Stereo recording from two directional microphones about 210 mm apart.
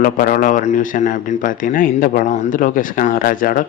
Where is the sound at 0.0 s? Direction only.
40° left (ahead or behind).